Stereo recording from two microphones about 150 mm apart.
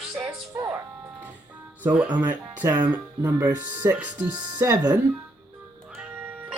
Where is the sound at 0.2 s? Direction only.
20° right (ahead or behind).